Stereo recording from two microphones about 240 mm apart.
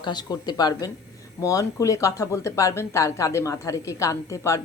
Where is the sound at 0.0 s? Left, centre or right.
Centre.